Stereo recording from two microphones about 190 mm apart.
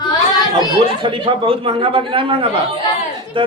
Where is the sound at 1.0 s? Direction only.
25° right (ahead or behind).